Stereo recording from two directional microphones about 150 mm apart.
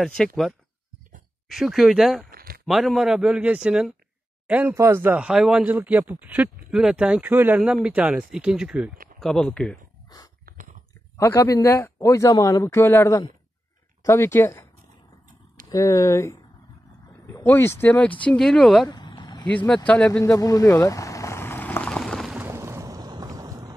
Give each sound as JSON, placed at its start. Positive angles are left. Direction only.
{"t": 0.0, "sound": "a man's voice", "side_deg": 5}
{"t": 1.5, "sound": "a man's voice", "side_deg": 0}
{"t": 2.3, "sound": "a sound", "side_deg": -80}
{"t": 2.6, "sound": "a man's voice", "side_deg": 0}
{"t": 10.0, "sound": "dog", "side_deg": 25}
{"t": 10.4, "sound": "dog", "side_deg": -60}
{"t": 11.1, "sound": "a man's voice", "side_deg": 20}
{"t": 15.7, "sound": "a man's voice", "side_deg": 20}
{"t": 18.9, "sound": "vehicle", "side_deg": 30}
{"t": 19.4, "sound": "speech", "side_deg": 10}
{"t": 20.1, "sound": "vehicle", "side_deg": 20}
{"t": 22.4, "sound": "music", "side_deg": -15}